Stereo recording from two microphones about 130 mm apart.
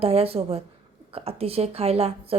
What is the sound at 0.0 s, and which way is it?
Speech, 50° right (ahead or behind).